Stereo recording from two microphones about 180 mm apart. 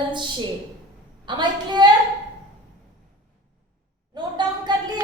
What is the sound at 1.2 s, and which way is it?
Speech, 25° right (ahead or behind).